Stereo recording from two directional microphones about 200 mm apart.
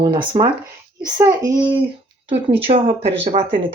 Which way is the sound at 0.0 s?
20° right (ahead or behind).